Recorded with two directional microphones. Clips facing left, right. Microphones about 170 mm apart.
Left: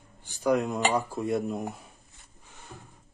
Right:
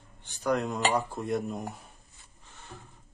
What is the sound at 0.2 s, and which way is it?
Speech, 5° left (ahead or behind).